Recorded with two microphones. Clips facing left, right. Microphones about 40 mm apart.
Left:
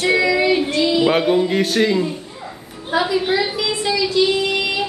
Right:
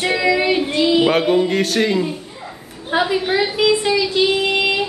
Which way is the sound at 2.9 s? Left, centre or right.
Right.